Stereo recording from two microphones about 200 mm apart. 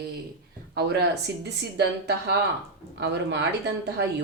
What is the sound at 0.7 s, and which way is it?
Speech, 55° right (ahead or behind).